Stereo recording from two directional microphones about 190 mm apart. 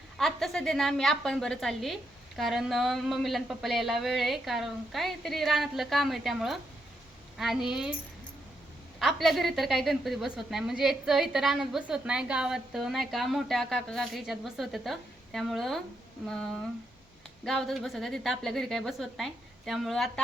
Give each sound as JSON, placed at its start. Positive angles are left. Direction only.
{"t": 0.2, "sound": "a woman's voice", "side_deg": 0}
{"t": 9.0, "sound": "a woman's voice", "side_deg": 0}